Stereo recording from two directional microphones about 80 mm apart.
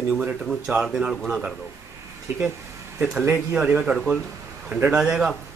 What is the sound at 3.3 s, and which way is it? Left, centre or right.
A man's voice, centre.